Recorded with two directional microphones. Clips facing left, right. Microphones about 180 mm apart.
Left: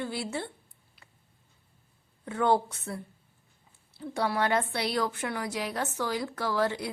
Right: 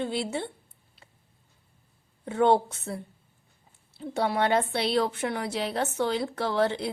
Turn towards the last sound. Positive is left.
turn(degrees=-25)  # may be behind; listen again after turning